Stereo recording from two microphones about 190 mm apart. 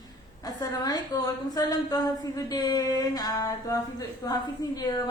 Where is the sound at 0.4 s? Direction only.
20° left (ahead or behind).